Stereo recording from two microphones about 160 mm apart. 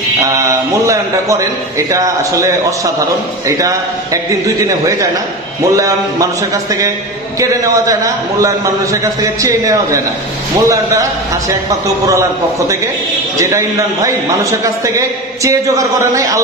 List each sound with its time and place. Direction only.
0.2 s a man's voice: 20° right (ahead or behind)